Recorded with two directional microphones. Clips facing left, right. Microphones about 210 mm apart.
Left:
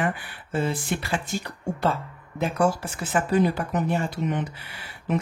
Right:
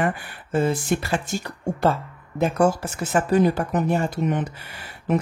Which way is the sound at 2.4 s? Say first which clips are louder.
Right 4 dB; 45° right (ahead or behind).